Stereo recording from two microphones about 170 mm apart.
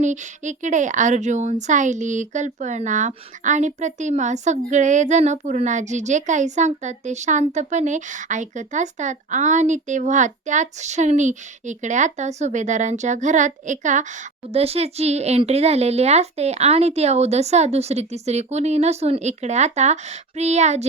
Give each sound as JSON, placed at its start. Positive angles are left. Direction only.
{"t": 0.0, "sound": "speech", "side_deg": -45}